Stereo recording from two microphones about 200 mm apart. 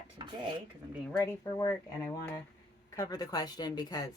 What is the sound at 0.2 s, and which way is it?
Speech, 25° right (ahead or behind).